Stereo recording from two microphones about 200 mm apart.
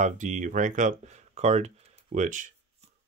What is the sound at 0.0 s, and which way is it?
Speech, 40° right (ahead or behind).